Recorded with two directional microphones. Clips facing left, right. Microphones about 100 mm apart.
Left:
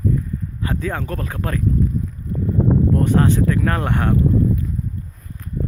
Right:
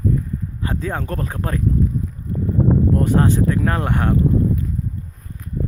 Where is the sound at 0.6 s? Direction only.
20° right (ahead or behind).